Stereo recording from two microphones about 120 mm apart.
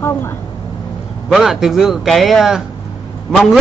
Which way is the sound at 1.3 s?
Centre (ahead or behind).